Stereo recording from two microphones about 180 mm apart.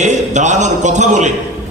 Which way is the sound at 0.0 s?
40° right (ahead or behind).